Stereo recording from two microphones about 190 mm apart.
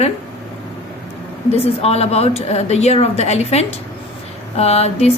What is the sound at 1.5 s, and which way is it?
Speech, 30° left (ahead or behind).